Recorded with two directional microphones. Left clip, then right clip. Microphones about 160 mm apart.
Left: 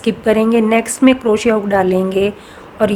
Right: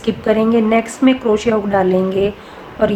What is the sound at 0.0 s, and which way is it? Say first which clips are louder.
A woman's voice: left 1 dB; 50° left (ahead or behind).